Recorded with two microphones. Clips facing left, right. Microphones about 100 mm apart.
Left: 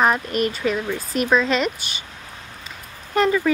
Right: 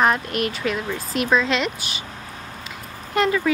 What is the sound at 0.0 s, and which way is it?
Speech, centre (ahead or behind).